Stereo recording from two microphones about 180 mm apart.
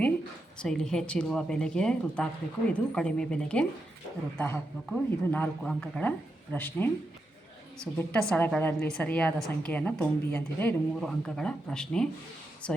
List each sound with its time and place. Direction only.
0.6 s a woman's voice: 5° left (ahead or behind)